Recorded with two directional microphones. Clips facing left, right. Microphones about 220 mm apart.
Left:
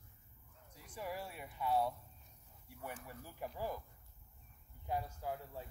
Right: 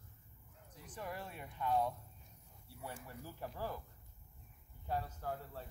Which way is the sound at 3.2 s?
10° left (ahead or behind).